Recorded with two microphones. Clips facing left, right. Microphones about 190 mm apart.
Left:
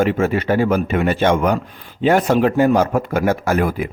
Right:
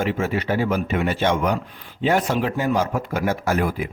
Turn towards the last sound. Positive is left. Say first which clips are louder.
# left 4 dB
turn(degrees=55)  # may be behind; listen again after turning